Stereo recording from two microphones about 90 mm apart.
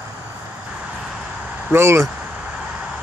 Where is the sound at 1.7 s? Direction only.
30° right (ahead or behind).